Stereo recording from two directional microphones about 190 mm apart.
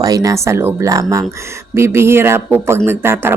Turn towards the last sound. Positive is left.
turn(degrees=-10)  # may be behind; listen again after turning